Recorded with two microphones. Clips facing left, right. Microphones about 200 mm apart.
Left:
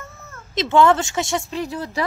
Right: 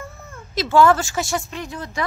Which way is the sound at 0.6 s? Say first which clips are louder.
Even; 20° left (ahead or behind).